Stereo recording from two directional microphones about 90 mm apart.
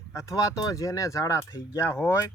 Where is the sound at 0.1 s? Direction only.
35° left (ahead or behind).